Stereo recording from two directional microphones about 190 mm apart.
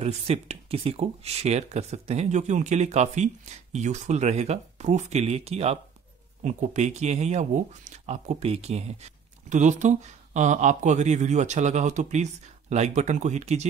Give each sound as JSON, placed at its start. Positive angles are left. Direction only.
{"t": 0.0, "sound": "speech", "side_deg": -30}